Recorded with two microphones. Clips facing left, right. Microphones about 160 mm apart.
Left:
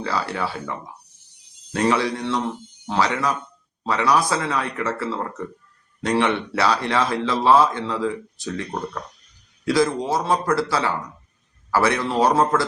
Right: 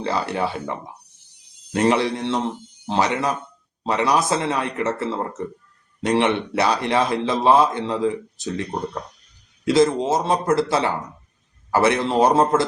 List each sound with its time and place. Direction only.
0.0 s speech: 20° right (ahead or behind)